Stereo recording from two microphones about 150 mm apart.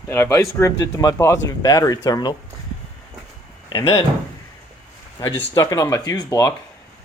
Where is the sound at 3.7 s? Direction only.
30° left (ahead or behind).